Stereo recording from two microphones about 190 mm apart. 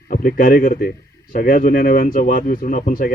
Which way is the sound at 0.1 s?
45° left (ahead or behind).